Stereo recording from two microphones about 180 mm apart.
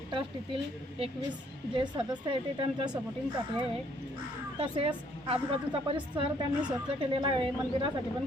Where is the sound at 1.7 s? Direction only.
25° right (ahead or behind).